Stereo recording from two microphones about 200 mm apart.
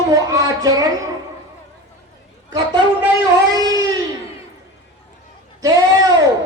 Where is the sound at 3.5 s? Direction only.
20° right (ahead or behind).